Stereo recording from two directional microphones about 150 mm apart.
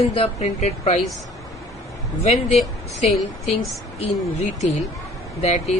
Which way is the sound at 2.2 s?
45° left (ahead or behind).